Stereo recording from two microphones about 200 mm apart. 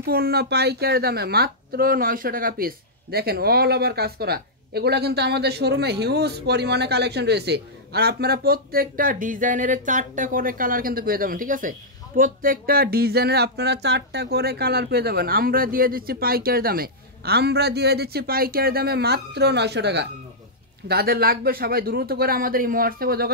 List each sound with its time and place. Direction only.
0.0 s speech: 50° right (ahead or behind)